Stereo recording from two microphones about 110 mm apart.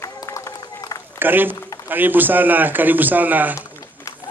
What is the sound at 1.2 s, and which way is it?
Speech, 20° right (ahead or behind).